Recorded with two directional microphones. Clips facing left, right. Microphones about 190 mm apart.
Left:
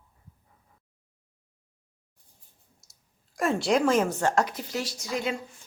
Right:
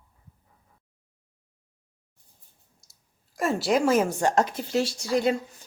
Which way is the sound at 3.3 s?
Centre (ahead or behind).